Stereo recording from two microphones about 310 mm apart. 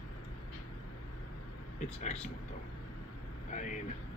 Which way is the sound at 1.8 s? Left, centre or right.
Left.